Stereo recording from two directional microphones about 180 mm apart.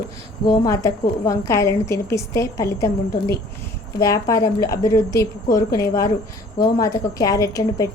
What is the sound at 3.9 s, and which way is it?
A woman's voice, 20° left (ahead or behind).